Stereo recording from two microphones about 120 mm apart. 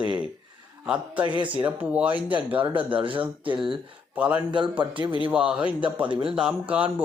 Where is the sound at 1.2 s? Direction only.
40° right (ahead or behind).